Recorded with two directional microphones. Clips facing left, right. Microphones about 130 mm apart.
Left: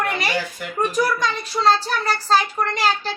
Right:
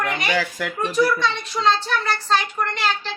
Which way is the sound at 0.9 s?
45° left (ahead or behind).